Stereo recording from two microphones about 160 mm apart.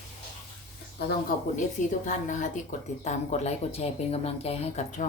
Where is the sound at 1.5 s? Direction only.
50° left (ahead or behind).